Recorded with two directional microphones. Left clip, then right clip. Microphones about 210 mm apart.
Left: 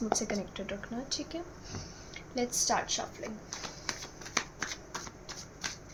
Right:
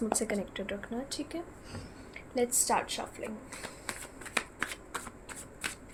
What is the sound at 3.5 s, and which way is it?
Shuffling cards, 10° right (ahead or behind).